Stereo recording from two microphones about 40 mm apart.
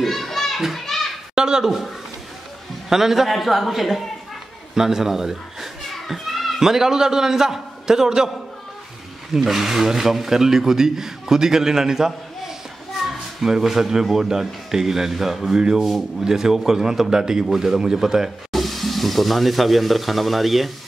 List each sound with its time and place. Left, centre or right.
0.0 s children playing: centre
1.3 s speech: centre
1.7 s a man's voice: centre
4.7 s children playing: centre
6.6 s speech: centre
9.3 s speech: centre
13.0 s children playing: centre
13.5 s speech: centre
18.5 s speech: centre